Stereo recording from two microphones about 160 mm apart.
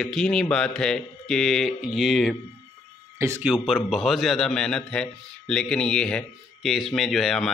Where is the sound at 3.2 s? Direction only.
15° right (ahead or behind).